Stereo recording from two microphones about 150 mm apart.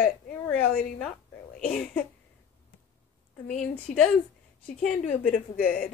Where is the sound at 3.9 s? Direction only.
60° left (ahead or behind).